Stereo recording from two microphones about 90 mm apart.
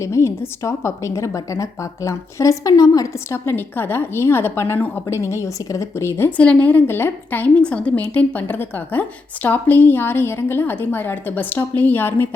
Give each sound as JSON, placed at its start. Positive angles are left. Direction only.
{"t": 0.0, "sound": "a woman's voice", "side_deg": 30}
{"t": 3.3, "sound": "a woman's voice", "side_deg": 25}
{"t": 6.4, "sound": "a woman's voice", "side_deg": 15}